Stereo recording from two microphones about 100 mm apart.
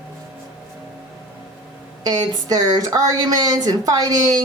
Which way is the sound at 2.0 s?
40° right (ahead or behind).